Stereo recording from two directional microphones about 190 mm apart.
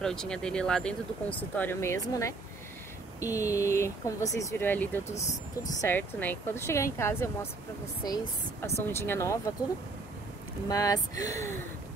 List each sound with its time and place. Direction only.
0.0 s speech: 5° left (ahead or behind)
10.7 s speech: 20° left (ahead or behind)